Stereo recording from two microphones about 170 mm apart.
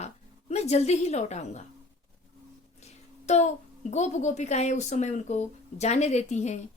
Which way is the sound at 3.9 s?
40° left (ahead or behind).